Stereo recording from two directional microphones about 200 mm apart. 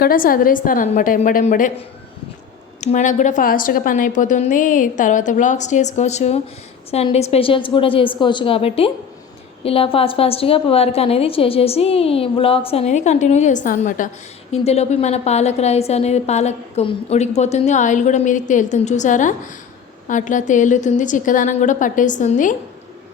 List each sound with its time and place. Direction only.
0.0 s a woman's voice: 45° left (ahead or behind)
2.8 s a woman's voice: 40° left (ahead or behind)
14.5 s a woman's voice: 30° left (ahead or behind)